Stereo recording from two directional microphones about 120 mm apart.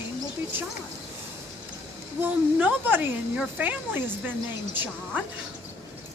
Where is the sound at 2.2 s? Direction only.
15° right (ahead or behind).